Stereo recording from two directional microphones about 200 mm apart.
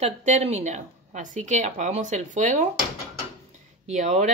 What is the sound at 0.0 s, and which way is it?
A woman's voice, 35° right (ahead or behind).